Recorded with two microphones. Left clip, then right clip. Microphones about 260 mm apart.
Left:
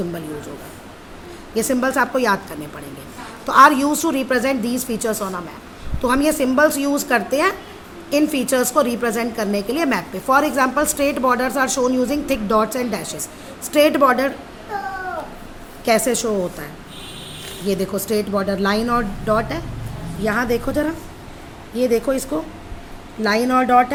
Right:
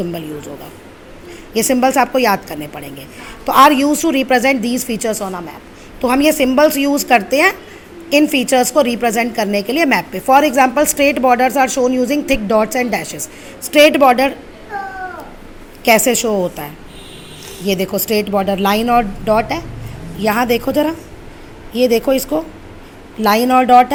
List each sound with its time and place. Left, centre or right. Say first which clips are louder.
1.5 s a woman's voice: right 6 dB; centre
15.8 s a woman's voice: right 6 dB; centre
17.7 s a woman's voice: right 5 dB; centre